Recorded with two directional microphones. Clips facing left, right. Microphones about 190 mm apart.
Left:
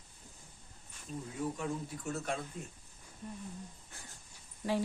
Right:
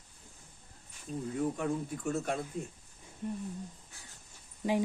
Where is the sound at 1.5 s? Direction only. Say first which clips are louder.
Right 4 dB; 50° right (ahead or behind).